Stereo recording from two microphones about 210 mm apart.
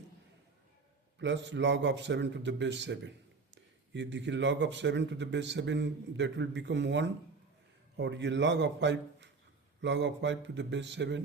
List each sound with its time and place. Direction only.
1.2 s speech: 55° right (ahead or behind)